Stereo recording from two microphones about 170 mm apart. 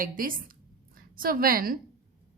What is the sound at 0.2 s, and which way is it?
A woman's voice, 55° right (ahead or behind).